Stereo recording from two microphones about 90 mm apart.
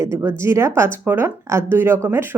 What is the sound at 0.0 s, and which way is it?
A woman's voice, 30° right (ahead or behind).